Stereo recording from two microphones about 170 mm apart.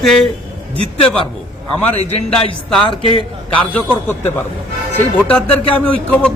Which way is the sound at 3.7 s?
10° left (ahead or behind).